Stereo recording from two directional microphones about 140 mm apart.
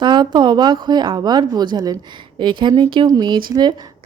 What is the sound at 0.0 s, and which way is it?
A woman's voice, 30° right (ahead or behind).